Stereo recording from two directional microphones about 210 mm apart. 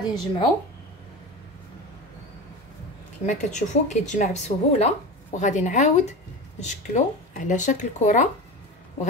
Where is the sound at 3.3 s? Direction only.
35° left (ahead or behind).